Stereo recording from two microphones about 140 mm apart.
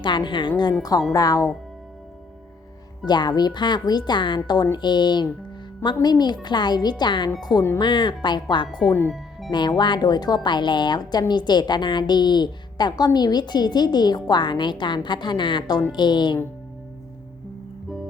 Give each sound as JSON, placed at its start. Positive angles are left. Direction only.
{"t": 0.0, "sound": "a woman's voice", "side_deg": 35}
{"t": 3.1, "sound": "a woman's voice", "side_deg": 30}
{"t": 8.9, "sound": "speech", "side_deg": 20}
{"t": 9.5, "sound": "a woman's voice", "side_deg": 30}